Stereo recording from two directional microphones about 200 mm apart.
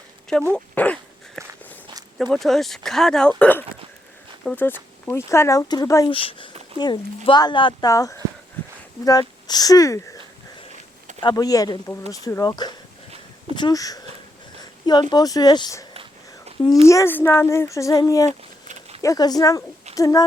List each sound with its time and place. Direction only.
0.3 s speech: 5° left (ahead or behind)
1.4 s walk: centre (ahead or behind)
2.1 s speech: centre (ahead or behind); by 6.1 s 15° left (ahead or behind)
6.1 s speech: 25° left (ahead or behind)
8.6 s a sound: 10° left (ahead or behind)
9.0 s speech: 20° left (ahead or behind)
11.2 s speech: 20° left (ahead or behind)
15.1 s speech: 20° left (ahead or behind)
18.3 s a sound: 35° right (ahead or behind)
19.0 s speech: 20° left (ahead or behind)